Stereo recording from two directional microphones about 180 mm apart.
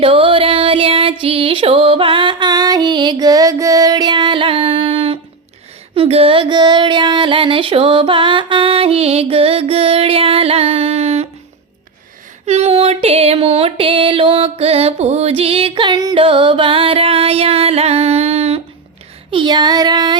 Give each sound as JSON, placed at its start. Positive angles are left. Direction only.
{"t": 0.0, "sound": "music", "side_deg": -30}
{"t": 5.9, "sound": "a sound", "side_deg": -30}
{"t": 12.5, "sound": "music", "side_deg": -35}
{"t": 19.3, "sound": "child singing", "side_deg": -25}